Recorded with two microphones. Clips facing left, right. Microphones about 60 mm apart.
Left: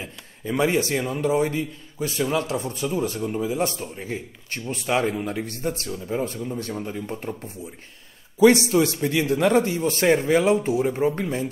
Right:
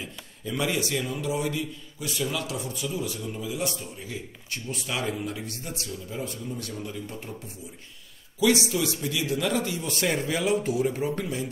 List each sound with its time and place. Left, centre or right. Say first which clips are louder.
0.0 s a man's voice: left 3 dB; left